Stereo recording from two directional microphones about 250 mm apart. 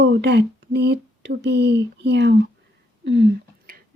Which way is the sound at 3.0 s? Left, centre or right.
Right.